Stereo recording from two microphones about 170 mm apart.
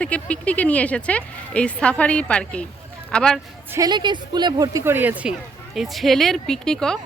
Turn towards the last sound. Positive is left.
turn(degrees=5)  # may be behind; listen again after turning